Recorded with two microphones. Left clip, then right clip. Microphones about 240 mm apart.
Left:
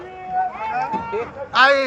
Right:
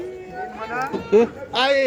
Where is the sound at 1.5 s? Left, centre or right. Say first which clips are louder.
Left 4 dB; centre.